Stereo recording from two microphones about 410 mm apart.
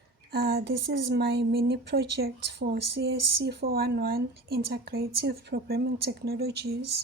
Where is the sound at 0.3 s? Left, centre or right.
Right.